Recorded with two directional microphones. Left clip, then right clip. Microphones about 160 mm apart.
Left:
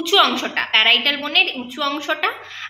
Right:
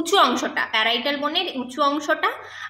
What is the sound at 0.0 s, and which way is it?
A woman's voice, 25° right (ahead or behind).